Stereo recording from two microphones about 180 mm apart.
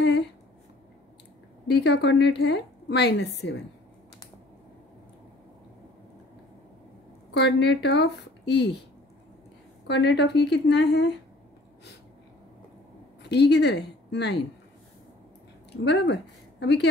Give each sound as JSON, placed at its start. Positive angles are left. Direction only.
{"t": 0.0, "sound": "a sound", "side_deg": 70}
{"t": 1.7, "sound": "a woman's voice", "side_deg": 70}
{"t": 7.3, "sound": "a woman's voice", "side_deg": 75}
{"t": 9.8, "sound": "a woman's voice", "side_deg": 70}
{"t": 13.2, "sound": "a woman's voice", "side_deg": 70}
{"t": 15.7, "sound": "speech", "side_deg": 70}